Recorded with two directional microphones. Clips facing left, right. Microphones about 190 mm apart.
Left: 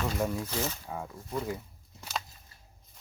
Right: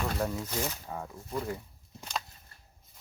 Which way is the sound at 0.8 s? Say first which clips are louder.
Left 1 dB; 5° left (ahead or behind).